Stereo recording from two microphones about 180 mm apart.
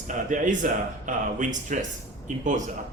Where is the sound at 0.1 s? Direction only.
45° right (ahead or behind).